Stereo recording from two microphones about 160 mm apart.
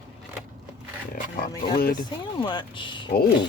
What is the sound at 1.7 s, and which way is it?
Speech, 65° left (ahead or behind).